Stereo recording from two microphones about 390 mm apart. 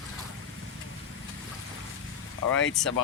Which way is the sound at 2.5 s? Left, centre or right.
Left.